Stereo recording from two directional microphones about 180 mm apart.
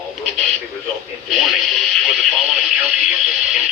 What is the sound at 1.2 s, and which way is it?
Radio, centre (ahead or behind).